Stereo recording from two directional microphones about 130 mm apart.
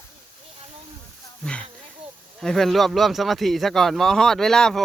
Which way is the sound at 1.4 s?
10° left (ahead or behind).